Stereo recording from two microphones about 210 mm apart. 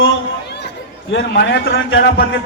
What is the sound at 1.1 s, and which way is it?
A man's voice, 55° left (ahead or behind).